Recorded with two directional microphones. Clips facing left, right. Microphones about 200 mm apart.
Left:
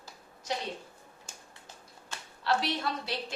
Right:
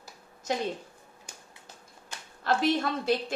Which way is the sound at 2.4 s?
50° right (ahead or behind).